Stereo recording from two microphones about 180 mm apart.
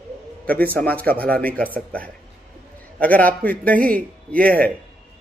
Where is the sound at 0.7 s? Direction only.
10° left (ahead or behind).